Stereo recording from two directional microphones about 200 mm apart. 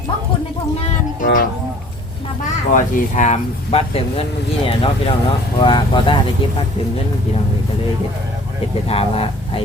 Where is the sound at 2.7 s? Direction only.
40° left (ahead or behind).